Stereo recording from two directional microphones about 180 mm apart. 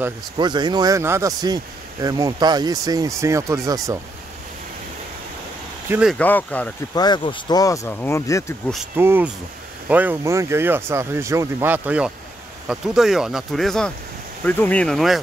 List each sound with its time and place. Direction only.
0.4 s speech: 25° right (ahead or behind)
5.9 s speech: 5° right (ahead or behind)
6.1 s speech: 10° left (ahead or behind)
7.0 s speech: 25° left (ahead or behind)
8.9 s speech: 10° right (ahead or behind)